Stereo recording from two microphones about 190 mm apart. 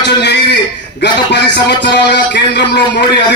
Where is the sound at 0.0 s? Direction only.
65° left (ahead or behind).